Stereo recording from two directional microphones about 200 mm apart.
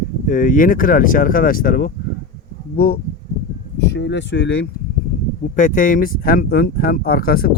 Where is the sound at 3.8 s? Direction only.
60° left (ahead or behind).